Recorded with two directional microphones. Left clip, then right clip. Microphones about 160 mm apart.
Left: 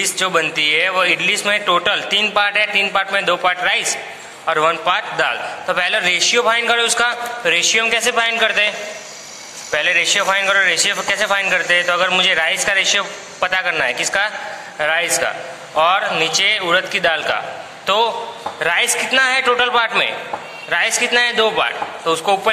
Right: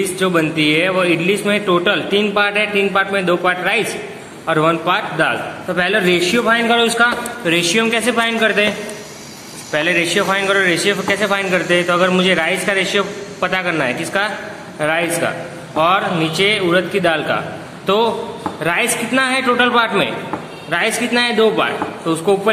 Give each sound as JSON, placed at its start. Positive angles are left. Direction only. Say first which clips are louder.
{"t": 0.0, "sound": "a man's voice", "louder": "even", "side_deg": 20}